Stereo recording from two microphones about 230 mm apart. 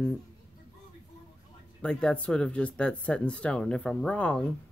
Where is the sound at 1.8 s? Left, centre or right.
Centre.